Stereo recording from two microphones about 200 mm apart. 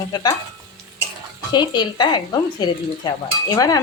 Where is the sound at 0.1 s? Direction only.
20° left (ahead or behind).